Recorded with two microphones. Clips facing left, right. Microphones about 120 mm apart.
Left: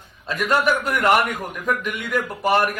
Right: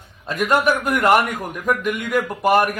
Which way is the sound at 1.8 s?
45° right (ahead or behind).